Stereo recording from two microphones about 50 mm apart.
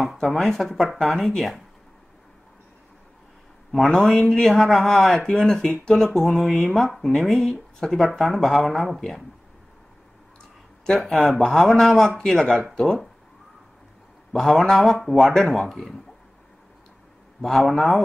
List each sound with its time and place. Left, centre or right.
0.0 s speech: centre
3.8 s speech: centre
4.3 s speech: centre
5.1 s speech: centre
5.4 s speech: centre
5.7 s speech: centre
6.1 s speech: centre
11.0 s speech: centre
14.3 s speech: centre
17.4 s a man's voice: centre